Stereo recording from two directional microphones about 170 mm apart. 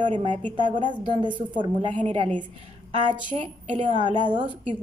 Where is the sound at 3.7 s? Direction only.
30° right (ahead or behind).